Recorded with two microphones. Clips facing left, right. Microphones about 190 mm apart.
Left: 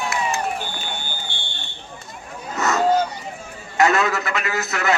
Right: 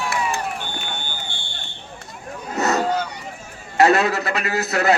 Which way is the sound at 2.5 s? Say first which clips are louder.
Right 2 dB; 35° right (ahead or behind).